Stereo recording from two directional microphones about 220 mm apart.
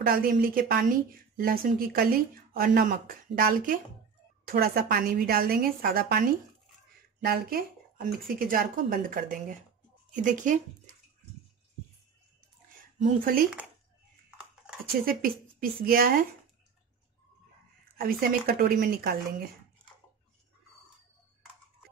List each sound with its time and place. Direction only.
0.0 s a woman's voice: 40° right (ahead or behind)
13.0 s speech: 40° right (ahead or behind)
15.0 s speech: 40° right (ahead or behind)
17.9 s a woman's voice: 45° right (ahead or behind)